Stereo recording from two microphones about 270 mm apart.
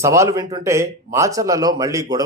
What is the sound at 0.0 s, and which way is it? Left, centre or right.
Speech, centre.